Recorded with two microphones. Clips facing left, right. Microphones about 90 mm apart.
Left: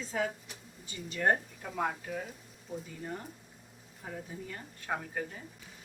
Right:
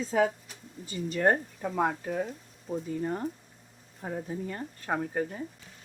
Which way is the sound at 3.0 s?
45° right (ahead or behind).